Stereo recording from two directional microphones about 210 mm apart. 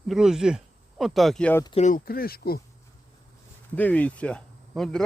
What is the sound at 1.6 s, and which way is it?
Speech, 30° left (ahead or behind).